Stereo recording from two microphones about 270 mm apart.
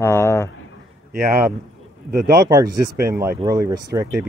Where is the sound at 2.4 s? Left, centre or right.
Centre.